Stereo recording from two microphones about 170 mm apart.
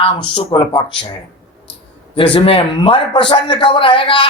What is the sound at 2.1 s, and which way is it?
A man's voice, 30° left (ahead or behind).